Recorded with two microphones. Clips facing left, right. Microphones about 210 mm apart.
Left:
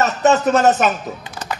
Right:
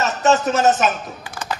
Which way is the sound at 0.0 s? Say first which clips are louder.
Left 2 dB; 60° left (ahead or behind).